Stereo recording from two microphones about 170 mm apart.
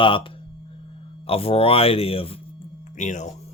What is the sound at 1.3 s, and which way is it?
Speech, 35° left (ahead or behind).